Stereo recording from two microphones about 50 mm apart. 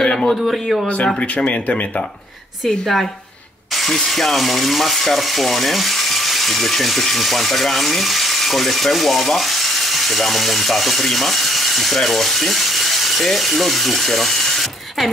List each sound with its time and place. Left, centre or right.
0.0 s a sound: centre
0.8 s speech: left
3.7 s speech: centre